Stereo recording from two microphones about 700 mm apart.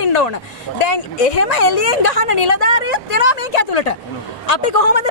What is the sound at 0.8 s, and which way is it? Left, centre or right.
Speech, left.